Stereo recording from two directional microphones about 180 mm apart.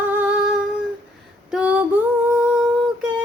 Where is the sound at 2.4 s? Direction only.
5° right (ahead or behind).